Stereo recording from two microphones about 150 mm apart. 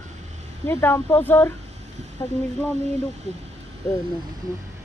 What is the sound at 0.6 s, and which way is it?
Speech, 15° left (ahead or behind).